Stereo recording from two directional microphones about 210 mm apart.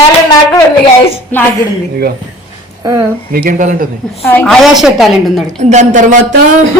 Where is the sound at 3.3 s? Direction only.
40° right (ahead or behind).